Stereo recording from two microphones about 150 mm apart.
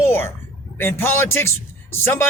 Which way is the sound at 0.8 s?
15° left (ahead or behind).